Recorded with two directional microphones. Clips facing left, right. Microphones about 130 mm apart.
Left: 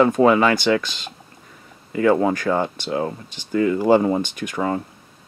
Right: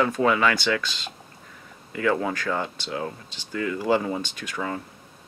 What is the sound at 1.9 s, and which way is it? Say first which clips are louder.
Speech: left 7 dB; 30° left (ahead or behind).